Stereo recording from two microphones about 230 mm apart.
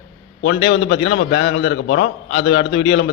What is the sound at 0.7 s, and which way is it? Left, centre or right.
A man's voice, left.